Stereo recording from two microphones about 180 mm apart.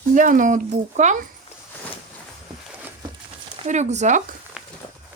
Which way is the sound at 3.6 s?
40° right (ahead or behind).